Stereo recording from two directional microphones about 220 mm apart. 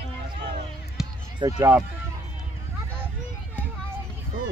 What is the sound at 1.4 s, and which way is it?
Speech, 20° right (ahead or behind).